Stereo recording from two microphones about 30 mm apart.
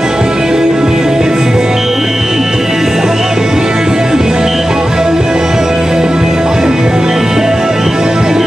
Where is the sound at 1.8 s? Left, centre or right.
Centre.